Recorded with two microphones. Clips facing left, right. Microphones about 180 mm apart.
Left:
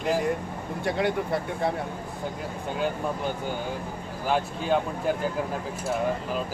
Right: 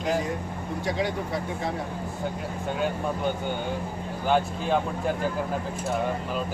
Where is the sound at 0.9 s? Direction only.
60° left (ahead or behind).